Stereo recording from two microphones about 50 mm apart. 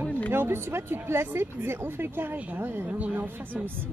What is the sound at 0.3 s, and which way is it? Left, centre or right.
Speech, right.